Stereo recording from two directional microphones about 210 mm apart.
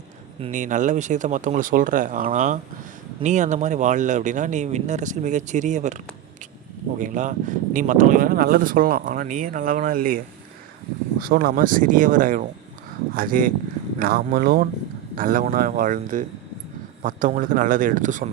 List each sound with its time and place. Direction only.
0.4 s speech: 35° right (ahead or behind)
7.0 s speech: 35° right (ahead or behind)